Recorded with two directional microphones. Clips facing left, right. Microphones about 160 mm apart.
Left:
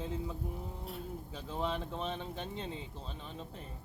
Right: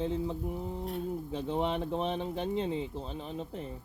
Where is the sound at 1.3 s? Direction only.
25° right (ahead or behind).